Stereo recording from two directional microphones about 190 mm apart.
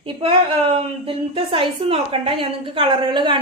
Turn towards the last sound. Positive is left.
turn(degrees=-25)  # may be behind; listen again after turning